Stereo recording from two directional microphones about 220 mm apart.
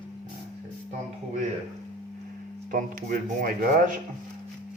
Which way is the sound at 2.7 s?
40° right (ahead or behind).